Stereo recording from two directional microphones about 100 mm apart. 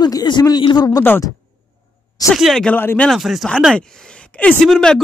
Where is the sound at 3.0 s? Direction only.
Centre (ahead or behind).